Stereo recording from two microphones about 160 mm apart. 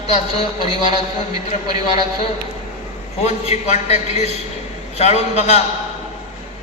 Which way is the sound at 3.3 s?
45° left (ahead or behind).